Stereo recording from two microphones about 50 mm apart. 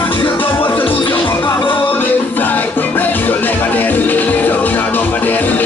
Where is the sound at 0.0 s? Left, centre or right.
Left.